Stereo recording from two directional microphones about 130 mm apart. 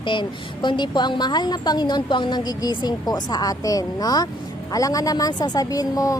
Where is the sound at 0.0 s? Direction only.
35° left (ahead or behind).